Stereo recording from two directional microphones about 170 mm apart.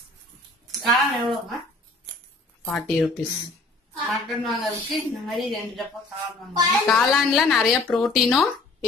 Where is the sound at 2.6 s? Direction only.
5° left (ahead or behind).